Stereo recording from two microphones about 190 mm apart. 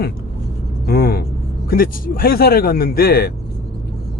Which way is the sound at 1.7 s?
50° left (ahead or behind).